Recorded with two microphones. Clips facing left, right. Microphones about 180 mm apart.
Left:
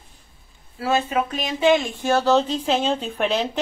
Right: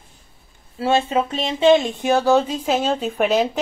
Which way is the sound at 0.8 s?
25° right (ahead or behind).